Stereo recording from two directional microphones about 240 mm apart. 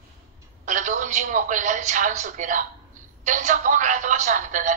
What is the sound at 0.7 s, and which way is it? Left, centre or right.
A woman's voice, right.